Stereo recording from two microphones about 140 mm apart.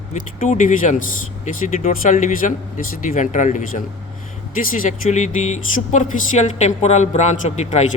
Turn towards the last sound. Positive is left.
turn(degrees=55)  # may be behind; listen again after turning